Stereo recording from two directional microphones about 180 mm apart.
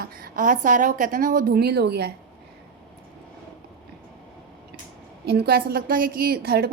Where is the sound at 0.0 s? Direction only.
50° right (ahead or behind).